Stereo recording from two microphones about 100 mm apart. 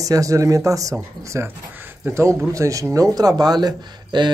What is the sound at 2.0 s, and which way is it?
Speech, 30° right (ahead or behind).